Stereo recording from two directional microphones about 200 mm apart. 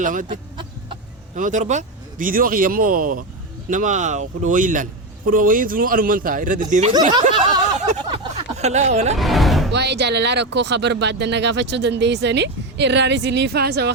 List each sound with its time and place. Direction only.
0.0 s a man's voice: 40° right (ahead or behind)
0.3 s chicken: 25° right (ahead or behind)
1.4 s a man's voice: 40° right (ahead or behind)
7.1 s speech: 20° right (ahead or behind)
9.1 s music: centre (ahead or behind)
9.7 s speech: 55° right (ahead or behind)